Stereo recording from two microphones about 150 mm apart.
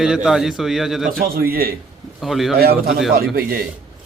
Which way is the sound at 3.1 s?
80° right.